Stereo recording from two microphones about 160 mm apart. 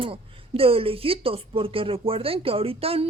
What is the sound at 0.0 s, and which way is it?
Speech, 35° right (ahead or behind).